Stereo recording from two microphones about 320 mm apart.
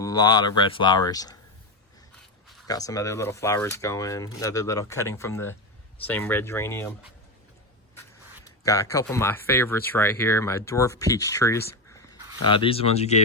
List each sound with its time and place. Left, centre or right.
0.0 s speech: centre
2.6 s speech: centre
8.4 s speech: centre